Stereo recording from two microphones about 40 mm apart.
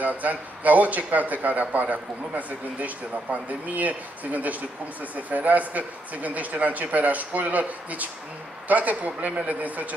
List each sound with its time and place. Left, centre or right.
0.0 s a man's voice: right